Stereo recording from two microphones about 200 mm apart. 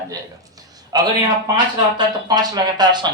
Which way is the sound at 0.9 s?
20° right (ahead or behind).